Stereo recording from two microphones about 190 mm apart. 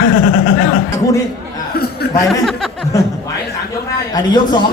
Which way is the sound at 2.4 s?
Centre (ahead or behind).